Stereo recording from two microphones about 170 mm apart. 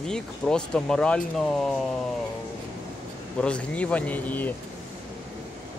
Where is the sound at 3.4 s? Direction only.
5° left (ahead or behind).